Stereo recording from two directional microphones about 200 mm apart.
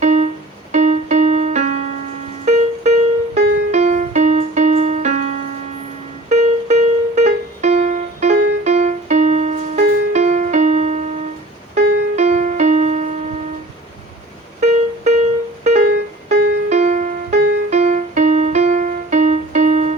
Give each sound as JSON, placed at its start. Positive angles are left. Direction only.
{"t": 0.0, "sound": "music", "side_deg": -35}
{"t": 15.6, "sound": "music", "side_deg": -35}